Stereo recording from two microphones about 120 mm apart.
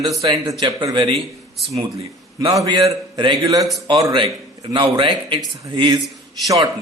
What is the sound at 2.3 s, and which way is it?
A man's voice, 35° right (ahead or behind).